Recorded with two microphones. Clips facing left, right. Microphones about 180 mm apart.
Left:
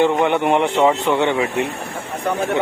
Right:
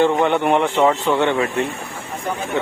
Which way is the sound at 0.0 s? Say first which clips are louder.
Even; 15° left (ahead or behind).